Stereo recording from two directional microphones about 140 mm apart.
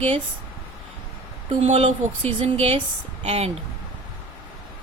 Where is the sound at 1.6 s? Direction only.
45° right (ahead or behind).